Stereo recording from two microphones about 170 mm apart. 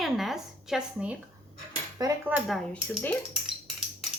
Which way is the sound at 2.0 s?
25° right (ahead or behind).